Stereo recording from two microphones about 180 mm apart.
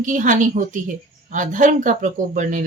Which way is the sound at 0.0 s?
45° right (ahead or behind).